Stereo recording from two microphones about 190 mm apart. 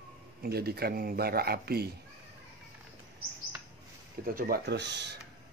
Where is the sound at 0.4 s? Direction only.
55° right (ahead or behind).